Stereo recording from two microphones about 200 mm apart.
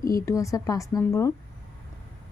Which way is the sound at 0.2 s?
15° left (ahead or behind).